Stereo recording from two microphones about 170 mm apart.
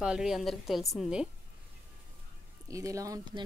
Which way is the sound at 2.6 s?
20° right (ahead or behind).